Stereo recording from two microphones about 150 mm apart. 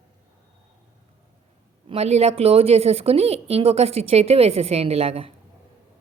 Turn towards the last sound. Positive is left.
turn(degrees=-40)  # may be behind; listen again after turning